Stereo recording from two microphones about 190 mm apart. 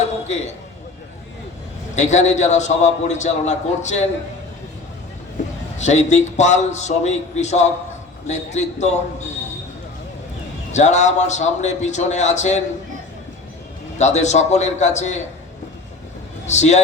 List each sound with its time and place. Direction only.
2.0 s a man's voice: 40° left (ahead or behind)
5.7 s a man's voice: 35° left (ahead or behind)
10.7 s a man's voice: 40° left (ahead or behind)
14.0 s a man's voice: 35° left (ahead or behind)
16.5 s a man's voice: 35° left (ahead or behind)